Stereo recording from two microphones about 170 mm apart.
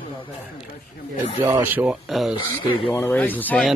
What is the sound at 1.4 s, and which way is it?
Speech, 15° right (ahead or behind).